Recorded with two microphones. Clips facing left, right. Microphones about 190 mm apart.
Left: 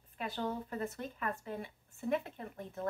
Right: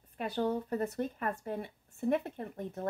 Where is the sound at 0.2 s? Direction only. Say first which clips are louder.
Right 6 dB; 40° right (ahead or behind).